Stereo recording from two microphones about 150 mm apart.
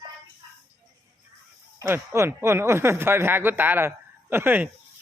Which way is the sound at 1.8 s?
15° right (ahead or behind).